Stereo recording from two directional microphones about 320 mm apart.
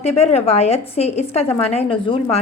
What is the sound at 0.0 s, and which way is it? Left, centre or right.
A woman's voice, centre.